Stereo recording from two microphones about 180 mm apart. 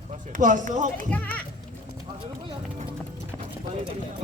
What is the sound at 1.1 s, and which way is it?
Speech, 10° left (ahead or behind).